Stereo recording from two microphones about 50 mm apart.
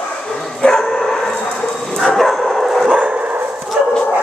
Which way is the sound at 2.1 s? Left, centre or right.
Centre.